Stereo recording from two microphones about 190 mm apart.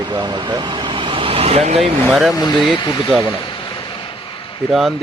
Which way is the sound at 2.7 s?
25° left (ahead or behind).